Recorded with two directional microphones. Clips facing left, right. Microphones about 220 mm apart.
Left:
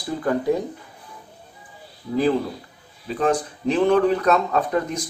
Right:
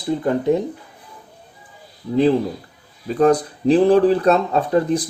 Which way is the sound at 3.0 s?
40° right (ahead or behind).